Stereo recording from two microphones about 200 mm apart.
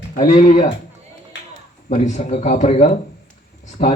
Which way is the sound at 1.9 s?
35° left (ahead or behind).